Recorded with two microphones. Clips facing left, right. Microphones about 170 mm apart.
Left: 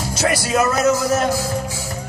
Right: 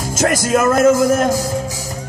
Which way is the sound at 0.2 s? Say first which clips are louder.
Right 3 dB; 45° right (ahead or behind).